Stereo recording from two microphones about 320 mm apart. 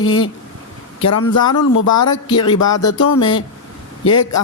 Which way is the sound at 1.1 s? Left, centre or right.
Left.